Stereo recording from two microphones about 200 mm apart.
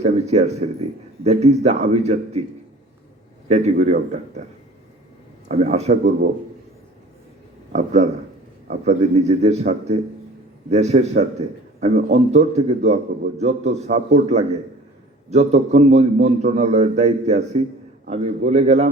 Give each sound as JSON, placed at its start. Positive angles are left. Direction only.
{"t": 0.0, "sound": "speech", "side_deg": -35}
{"t": 3.5, "sound": "speech", "side_deg": -35}
{"t": 5.5, "sound": "speech", "side_deg": -30}
{"t": 7.7, "sound": "speech", "side_deg": -35}